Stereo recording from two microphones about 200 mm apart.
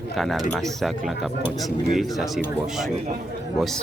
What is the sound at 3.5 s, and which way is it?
Speech, centre (ahead or behind).